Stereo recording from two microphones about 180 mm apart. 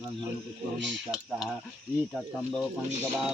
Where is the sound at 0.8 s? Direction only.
85° right.